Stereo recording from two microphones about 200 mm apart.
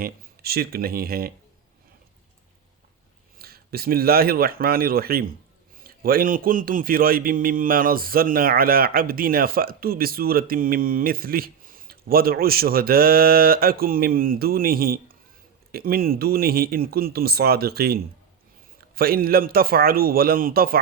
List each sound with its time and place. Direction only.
0.0 s a man's voice: 50° right (ahead or behind)
3.3 s a man's voice: 50° right (ahead or behind)